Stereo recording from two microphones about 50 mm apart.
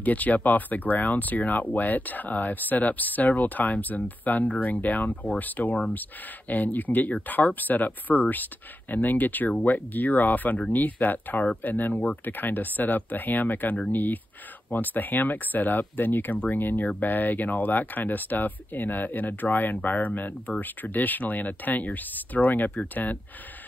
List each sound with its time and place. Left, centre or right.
0.0 s speech: left
12.4 s speech: left